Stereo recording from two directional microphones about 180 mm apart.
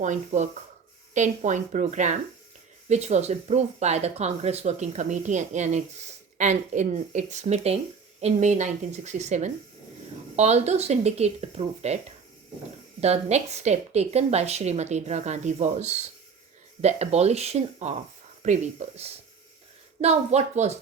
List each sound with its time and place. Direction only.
0.0 s speech: 40° right (ahead or behind)